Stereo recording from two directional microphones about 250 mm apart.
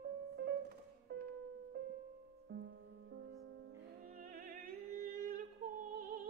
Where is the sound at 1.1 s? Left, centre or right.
Right.